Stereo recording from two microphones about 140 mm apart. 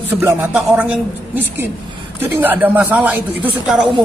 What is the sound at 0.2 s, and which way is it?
Speech, 10° right (ahead or behind).